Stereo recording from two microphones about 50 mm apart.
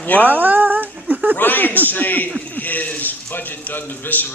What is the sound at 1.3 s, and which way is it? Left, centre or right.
A man's voice, left.